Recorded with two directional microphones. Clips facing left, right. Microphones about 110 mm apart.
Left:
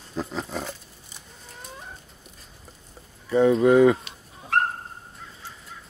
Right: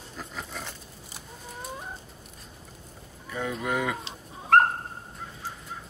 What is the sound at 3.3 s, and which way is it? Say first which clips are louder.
Speech: left 13 dB; 30° left (ahead or behind).